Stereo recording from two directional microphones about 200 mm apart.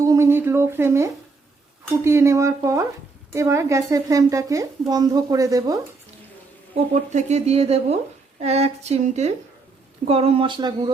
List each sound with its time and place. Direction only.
0.0 s speech: 15° right (ahead or behind)
6.7 s speech: 35° right (ahead or behind)